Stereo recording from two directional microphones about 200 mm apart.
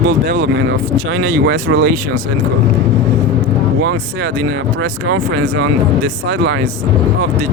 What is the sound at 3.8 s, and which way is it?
Speech, 70° right (ahead or behind).